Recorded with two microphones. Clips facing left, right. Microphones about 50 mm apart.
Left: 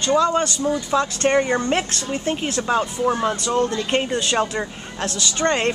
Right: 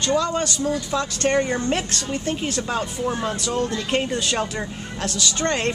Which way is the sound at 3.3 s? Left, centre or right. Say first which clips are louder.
Left 3 dB; centre.